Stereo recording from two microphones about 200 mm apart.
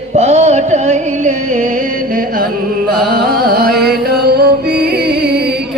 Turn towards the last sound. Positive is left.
turn(degrees=-55)  # may be behind; listen again after turning